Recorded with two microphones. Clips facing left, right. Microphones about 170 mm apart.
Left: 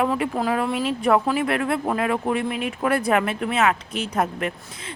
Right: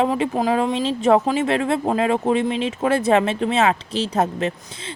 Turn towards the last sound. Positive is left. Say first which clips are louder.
# right 3 dB
turn(degrees=-25)  # may be behind; listen again after turning